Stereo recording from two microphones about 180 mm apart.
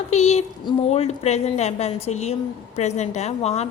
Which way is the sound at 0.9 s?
35° left (ahead or behind).